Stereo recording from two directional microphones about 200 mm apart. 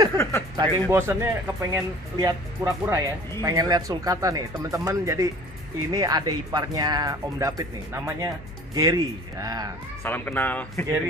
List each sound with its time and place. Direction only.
0.6 s speech: 10° right (ahead or behind)
10.0 s speech: 10° left (ahead or behind)